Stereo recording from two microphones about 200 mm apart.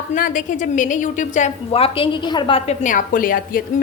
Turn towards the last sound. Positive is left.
turn(degrees=45)  # may be behind; listen again after turning